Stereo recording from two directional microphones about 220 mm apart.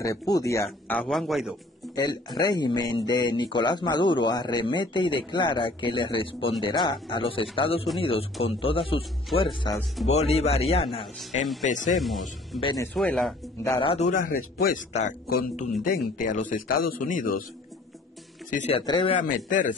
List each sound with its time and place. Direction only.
0.0 s speech: 15° left (ahead or behind)
2.0 s a man's voice: 20° left (ahead or behind); by 11.9 s 35° left (ahead or behind)
12.5 s speech: 20° left (ahead or behind)
12.8 s speech: 5° left (ahead or behind)
13.7 s a man's voice: 20° left (ahead or behind); by 17.5 s 40° left (ahead or behind)
18.7 s speech: 20° left (ahead or behind)
19.2 s a man's voice: 35° left (ahead or behind)